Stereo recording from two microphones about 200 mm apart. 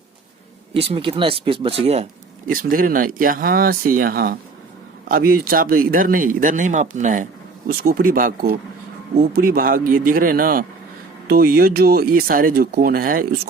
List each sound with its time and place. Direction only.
0.7 s speech: 25° right (ahead or behind)
2.5 s speech: 45° right (ahead or behind)